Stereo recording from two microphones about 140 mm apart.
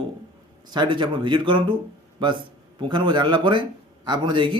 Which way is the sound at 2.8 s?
35° right (ahead or behind).